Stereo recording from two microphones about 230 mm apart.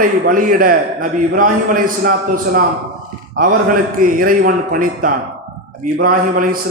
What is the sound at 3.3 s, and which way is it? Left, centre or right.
A man's voice, right.